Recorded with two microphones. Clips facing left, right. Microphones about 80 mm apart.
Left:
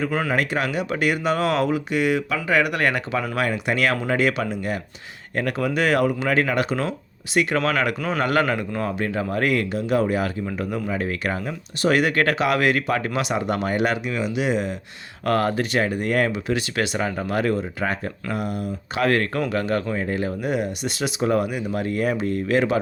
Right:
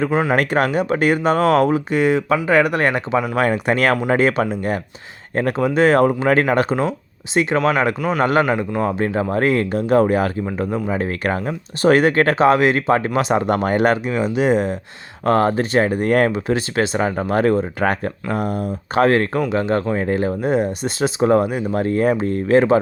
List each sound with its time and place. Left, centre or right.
0.1 s a man's voice: right
0.3 s speech: right
3.3 s speech: right
7.3 s a man's voice: right
9.7 s speech: right
15.2 s speech: right